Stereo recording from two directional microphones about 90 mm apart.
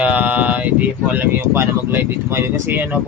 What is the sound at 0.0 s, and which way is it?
Speech, 15° right (ahead or behind).